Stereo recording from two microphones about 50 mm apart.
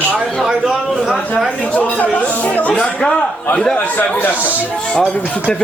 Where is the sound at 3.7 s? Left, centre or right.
Left.